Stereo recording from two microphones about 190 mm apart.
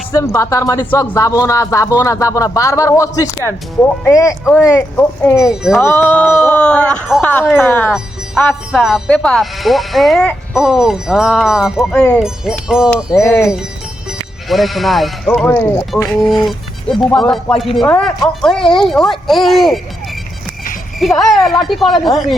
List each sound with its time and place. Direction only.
0.3 s a man's voice: 15° left (ahead or behind)
5.5 s speech: 5° right (ahead or behind)
5.8 s a man's voice: 10° left (ahead or behind)
13.2 s a man's voice: 15° left (ahead or behind)
14.5 s speech: centre (ahead or behind)
21.0 s speech: centre (ahead or behind)